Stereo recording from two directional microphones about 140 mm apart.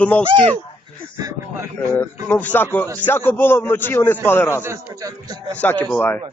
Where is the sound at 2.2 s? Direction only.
10° left (ahead or behind).